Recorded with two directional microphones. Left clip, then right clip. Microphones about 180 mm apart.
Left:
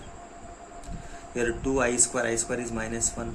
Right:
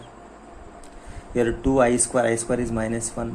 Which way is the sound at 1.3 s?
35° right (ahead or behind).